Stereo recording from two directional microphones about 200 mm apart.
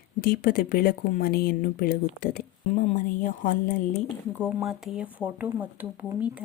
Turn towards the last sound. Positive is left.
turn(degrees=-5)  # may be behind; listen again after turning